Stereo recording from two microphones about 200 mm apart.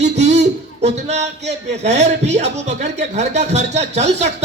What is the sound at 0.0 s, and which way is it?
A man's voice, 35° right (ahead or behind).